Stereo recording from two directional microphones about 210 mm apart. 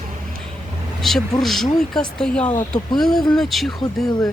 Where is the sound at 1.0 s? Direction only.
Centre (ahead or behind).